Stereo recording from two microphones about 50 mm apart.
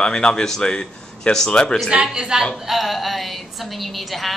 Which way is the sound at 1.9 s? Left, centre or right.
Centre.